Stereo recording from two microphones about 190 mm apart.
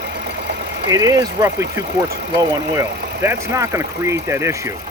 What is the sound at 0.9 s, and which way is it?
Speech, 20° right (ahead or behind).